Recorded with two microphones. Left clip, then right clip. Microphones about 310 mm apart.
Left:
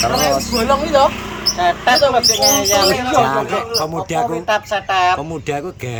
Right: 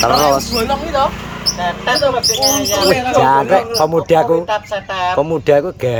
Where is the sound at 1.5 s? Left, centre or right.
Centre.